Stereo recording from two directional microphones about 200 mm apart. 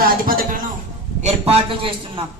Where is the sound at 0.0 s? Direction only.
45° right (ahead or behind).